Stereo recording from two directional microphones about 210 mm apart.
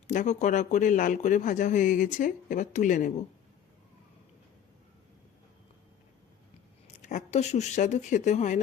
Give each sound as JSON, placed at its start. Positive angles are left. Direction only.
{"t": 0.1, "sound": "speech", "side_deg": 35}
{"t": 7.0, "sound": "speech", "side_deg": 35}